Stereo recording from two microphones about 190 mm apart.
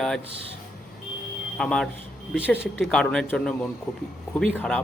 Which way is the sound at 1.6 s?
5° left (ahead or behind).